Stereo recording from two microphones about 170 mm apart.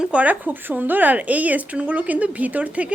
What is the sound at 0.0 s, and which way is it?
A woman's voice, 5° right (ahead or behind).